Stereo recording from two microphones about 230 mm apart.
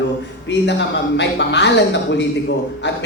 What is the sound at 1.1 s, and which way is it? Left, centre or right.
Speech, left.